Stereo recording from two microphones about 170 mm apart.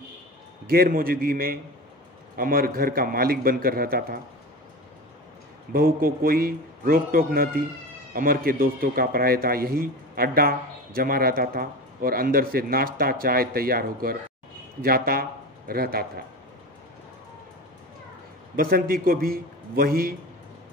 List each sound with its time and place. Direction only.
0.7 s speech: 60° right (ahead or behind)
5.7 s speech: 60° right (ahead or behind)
18.6 s speech: 60° right (ahead or behind)